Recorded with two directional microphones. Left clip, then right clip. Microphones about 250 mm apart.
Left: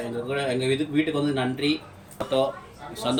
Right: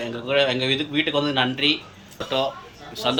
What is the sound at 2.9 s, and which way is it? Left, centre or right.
Speech, centre.